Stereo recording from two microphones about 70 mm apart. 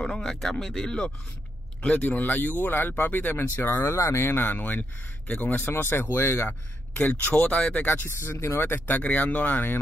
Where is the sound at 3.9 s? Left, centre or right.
Left.